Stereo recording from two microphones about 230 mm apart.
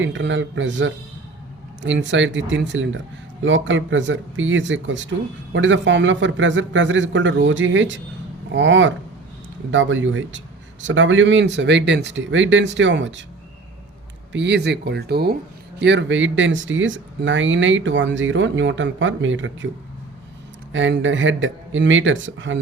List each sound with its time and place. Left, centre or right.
0.0 s a man's voice: right
14.3 s a man's voice: right
20.7 s speech: right